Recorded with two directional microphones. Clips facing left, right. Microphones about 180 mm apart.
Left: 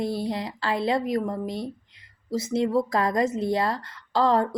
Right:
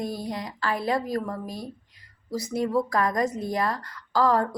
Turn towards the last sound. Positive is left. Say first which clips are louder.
# left 1 dB
turn(degrees=25)  # may be behind; listen again after turning